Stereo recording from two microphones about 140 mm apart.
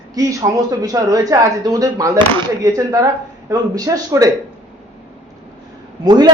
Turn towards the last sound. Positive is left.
turn(degrees=-30)  # may be behind; listen again after turning